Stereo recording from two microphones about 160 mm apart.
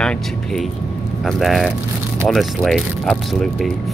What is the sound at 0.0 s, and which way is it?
Speech, 5° left (ahead or behind).